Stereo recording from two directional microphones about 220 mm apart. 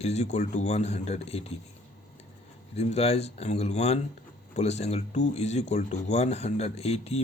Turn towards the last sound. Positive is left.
turn(degrees=30)  # may be behind; listen again after turning